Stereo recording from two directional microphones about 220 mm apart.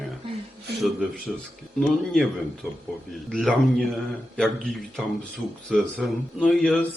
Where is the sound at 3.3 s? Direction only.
Centre (ahead or behind).